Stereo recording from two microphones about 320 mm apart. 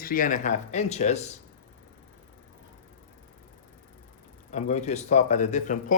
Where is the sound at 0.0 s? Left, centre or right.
Left.